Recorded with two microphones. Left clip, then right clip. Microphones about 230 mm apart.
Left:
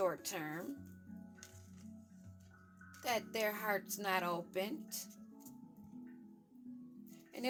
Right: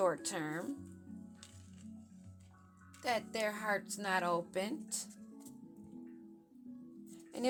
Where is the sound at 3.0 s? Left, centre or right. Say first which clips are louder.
Right 1 dB; centre.